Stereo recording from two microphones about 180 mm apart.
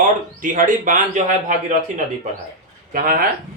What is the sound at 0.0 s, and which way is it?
Speech, 45° right (ahead or behind).